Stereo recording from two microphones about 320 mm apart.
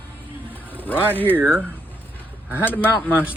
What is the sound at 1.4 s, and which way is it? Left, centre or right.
Speech, centre.